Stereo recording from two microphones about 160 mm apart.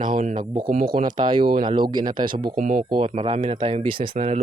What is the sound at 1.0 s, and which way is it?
Speech, 30° right (ahead or behind).